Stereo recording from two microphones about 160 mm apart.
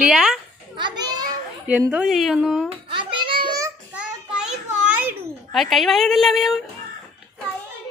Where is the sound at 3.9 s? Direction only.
5° right (ahead or behind).